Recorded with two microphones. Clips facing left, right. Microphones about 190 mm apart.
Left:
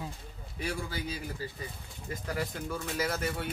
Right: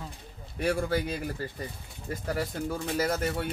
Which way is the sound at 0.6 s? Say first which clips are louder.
Right 8 dB; 55° right (ahead or behind).